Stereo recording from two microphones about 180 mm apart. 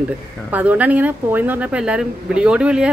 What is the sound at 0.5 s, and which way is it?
Speech, 10° right (ahead or behind).